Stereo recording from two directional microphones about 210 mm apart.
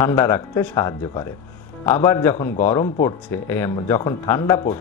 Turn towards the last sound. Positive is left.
turn(degrees=10)  # may be behind; listen again after turning